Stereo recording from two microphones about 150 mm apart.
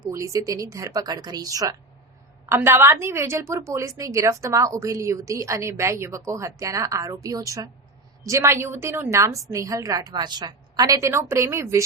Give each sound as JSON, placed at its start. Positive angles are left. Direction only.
{"t": 0.1, "sound": "a woman's voice", "side_deg": -20}